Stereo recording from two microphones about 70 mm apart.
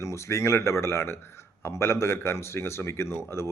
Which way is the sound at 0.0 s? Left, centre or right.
Left.